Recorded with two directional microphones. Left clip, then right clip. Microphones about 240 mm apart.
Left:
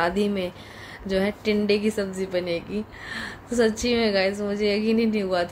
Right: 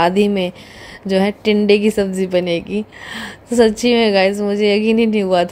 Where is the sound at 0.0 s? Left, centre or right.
Right.